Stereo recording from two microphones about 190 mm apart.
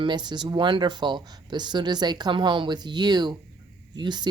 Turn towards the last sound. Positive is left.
turn(degrees=-25)  # may be behind; listen again after turning